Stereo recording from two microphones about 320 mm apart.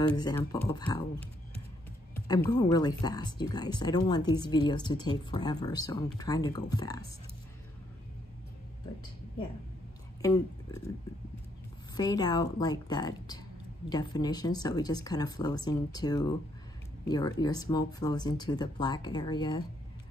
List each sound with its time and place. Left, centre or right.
0.0 s speech: centre
2.1 s speech: centre
10.2 s speech: centre
12.0 s speech: centre